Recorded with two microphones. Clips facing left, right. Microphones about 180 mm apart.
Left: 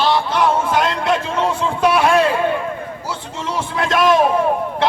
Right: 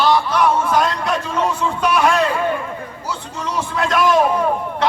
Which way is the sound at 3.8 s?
25° left (ahead or behind).